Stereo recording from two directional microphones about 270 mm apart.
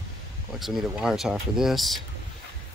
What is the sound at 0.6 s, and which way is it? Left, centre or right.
Speech, centre.